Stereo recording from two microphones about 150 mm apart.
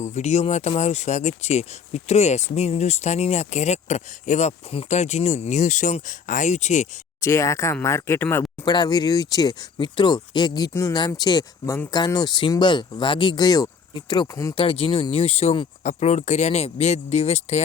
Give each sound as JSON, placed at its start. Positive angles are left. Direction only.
{"t": 0.0, "sound": "speech", "side_deg": 50}
{"t": 7.2, "sound": "speech", "side_deg": 20}
{"t": 8.6, "sound": "speech", "side_deg": 30}
{"t": 14.5, "sound": "speech", "side_deg": 35}